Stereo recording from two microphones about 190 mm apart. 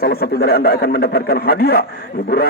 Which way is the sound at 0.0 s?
55° left (ahead or behind).